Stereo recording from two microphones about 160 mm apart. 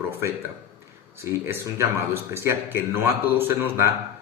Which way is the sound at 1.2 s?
15° right (ahead or behind).